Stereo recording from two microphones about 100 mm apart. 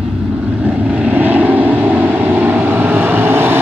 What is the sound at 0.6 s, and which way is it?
Vehicle, 15° right (ahead or behind).